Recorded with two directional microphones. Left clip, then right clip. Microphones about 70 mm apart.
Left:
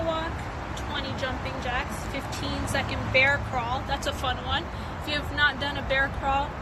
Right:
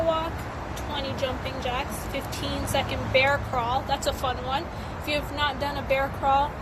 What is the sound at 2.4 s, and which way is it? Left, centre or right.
Speech, centre.